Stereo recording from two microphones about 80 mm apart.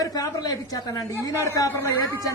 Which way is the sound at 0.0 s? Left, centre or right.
Left.